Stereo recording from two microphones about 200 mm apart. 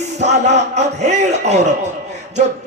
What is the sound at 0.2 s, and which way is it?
Speech, 35° right (ahead or behind).